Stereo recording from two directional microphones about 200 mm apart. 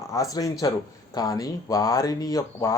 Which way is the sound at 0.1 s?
15° left (ahead or behind).